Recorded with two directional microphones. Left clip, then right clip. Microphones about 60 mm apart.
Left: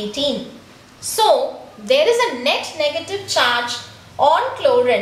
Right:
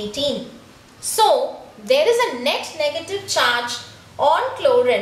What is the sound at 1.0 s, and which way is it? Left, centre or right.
A woman's voice, right.